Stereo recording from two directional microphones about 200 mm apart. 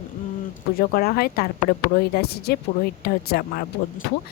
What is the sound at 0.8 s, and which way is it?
A woman's voice, 50° left (ahead or behind).